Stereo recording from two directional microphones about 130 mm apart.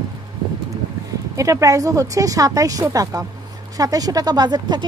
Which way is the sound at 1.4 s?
25° right (ahead or behind).